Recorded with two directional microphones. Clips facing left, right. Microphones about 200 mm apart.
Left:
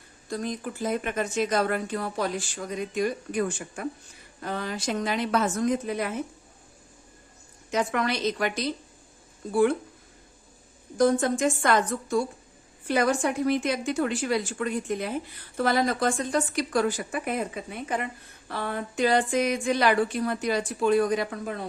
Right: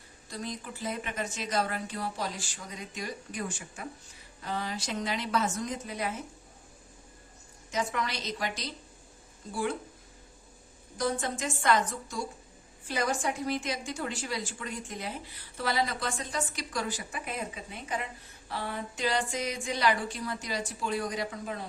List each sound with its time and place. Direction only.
0.3 s speech: 50° left (ahead or behind)
7.7 s speech: 60° left (ahead or behind)
10.9 s a woman's voice: 50° left (ahead or behind)